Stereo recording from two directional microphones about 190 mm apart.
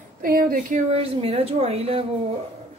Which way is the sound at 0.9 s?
30° right (ahead or behind).